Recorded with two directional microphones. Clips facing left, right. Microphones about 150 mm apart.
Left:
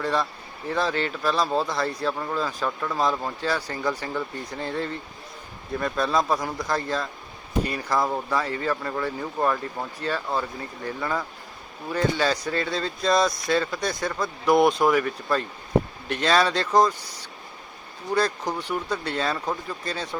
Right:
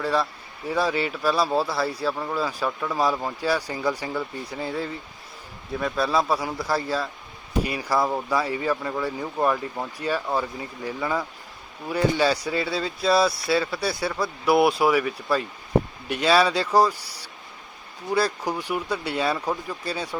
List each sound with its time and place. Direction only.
0.0 s a man's voice: 5° right (ahead or behind)